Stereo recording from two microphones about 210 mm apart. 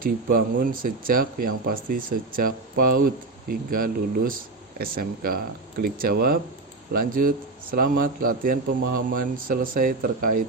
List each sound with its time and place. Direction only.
0.0 s a man's voice: 40° right (ahead or behind)